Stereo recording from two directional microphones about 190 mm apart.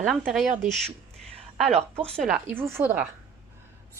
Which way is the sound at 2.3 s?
10° right (ahead or behind).